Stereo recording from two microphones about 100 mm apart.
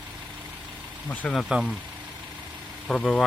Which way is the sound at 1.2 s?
5° left (ahead or behind).